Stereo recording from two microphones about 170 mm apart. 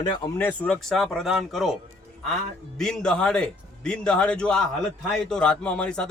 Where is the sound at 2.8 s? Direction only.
5° left (ahead or behind).